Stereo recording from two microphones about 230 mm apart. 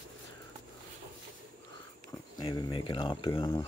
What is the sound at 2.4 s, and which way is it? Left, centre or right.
Speech, centre.